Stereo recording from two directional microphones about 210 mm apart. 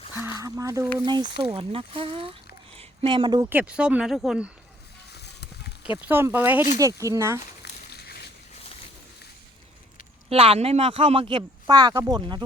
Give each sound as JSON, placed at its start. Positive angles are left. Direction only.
{"t": 0.3, "sound": "speech", "side_deg": -15}
{"t": 3.5, "sound": "speech", "side_deg": -5}
{"t": 5.1, "sound": "a sound", "side_deg": 50}
{"t": 6.0, "sound": "speech", "side_deg": -10}
{"t": 7.6, "sound": "a sound", "side_deg": 50}
{"t": 10.2, "sound": "speech", "side_deg": -25}